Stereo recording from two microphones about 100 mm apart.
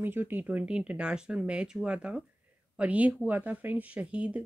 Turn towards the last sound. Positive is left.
turn(degrees=-10)  # may be behind; listen again after turning